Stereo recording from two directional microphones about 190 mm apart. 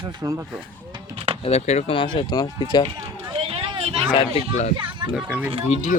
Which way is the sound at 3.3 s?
30° right (ahead or behind).